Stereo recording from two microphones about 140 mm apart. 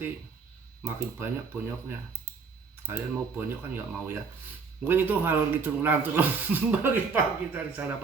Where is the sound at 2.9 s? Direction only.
15° right (ahead or behind).